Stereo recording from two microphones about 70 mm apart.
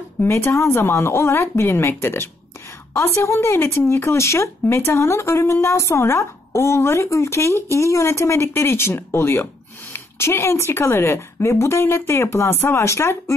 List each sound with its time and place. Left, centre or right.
0.2 s speech: left